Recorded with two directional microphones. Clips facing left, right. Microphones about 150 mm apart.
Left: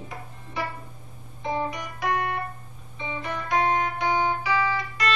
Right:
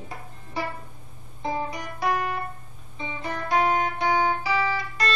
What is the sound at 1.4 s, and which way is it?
Music, 35° right (ahead or behind).